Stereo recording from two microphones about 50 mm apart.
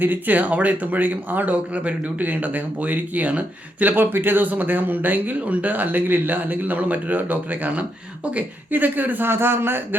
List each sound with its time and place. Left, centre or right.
0.0 s speech: right
8.7 s speech: right
9.2 s a man's voice: right